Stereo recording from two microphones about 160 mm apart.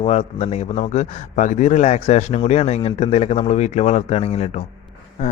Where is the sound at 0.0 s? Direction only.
40° left (ahead or behind).